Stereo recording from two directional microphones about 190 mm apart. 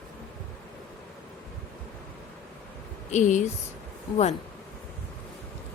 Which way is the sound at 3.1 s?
40° left (ahead or behind).